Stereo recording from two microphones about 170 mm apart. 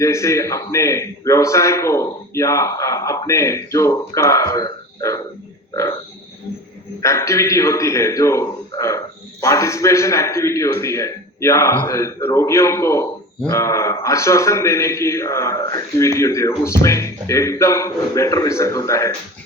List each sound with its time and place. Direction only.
0.0 s a man's voice: 15° left (ahead or behind)
7.0 s a man's voice: 15° left (ahead or behind)